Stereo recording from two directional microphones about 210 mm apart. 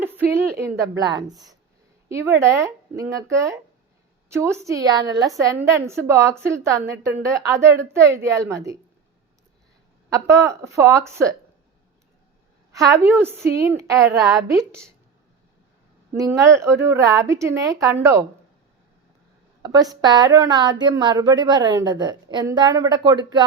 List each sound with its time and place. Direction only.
0.0 s a woman's voice: 10° right (ahead or behind)
10.1 s a woman's voice: 15° right (ahead or behind)
12.7 s a woman's voice: 15° right (ahead or behind)
16.1 s a woman's voice: 15° right (ahead or behind)
19.6 s a woman's voice: 15° right (ahead or behind)